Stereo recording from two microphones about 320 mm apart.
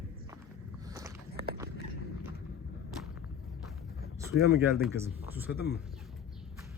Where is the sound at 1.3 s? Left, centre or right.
Right.